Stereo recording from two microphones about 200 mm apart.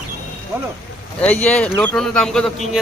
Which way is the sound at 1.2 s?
5° left (ahead or behind).